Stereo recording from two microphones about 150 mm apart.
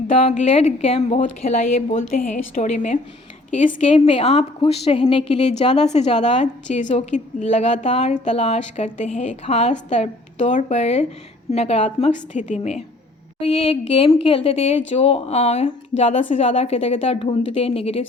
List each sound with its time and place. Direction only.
0.1 s a woman's voice: 45° left (ahead or behind)
2.1 s a woman's voice: 55° left (ahead or behind)
3.8 s a woman's voice: 40° left (ahead or behind)